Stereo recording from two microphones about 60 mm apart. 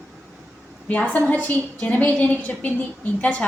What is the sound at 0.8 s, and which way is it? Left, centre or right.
A woman's voice, left.